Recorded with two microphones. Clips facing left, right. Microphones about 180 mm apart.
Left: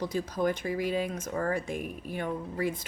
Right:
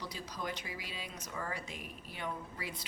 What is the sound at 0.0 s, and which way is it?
Speech, 50° left (ahead or behind).